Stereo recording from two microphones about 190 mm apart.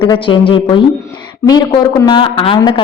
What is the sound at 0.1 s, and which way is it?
A woman's voice, 25° left (ahead or behind).